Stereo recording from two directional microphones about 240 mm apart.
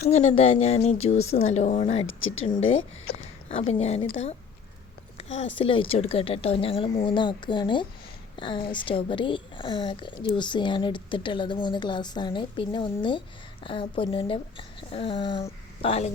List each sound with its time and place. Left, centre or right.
0.0 s a woman's voice: left
2.0 s speech: left
2.4 s a woman's voice: left
5.1 s a sound: left
5.6 s a woman's voice: left